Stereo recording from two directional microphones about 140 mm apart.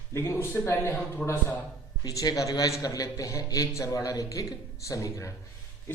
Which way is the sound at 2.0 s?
25° left (ahead or behind).